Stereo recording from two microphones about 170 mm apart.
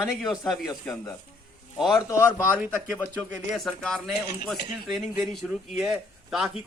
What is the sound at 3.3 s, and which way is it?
Speech, centre (ahead or behind).